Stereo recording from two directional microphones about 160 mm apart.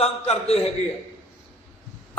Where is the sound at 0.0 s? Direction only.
40° left (ahead or behind).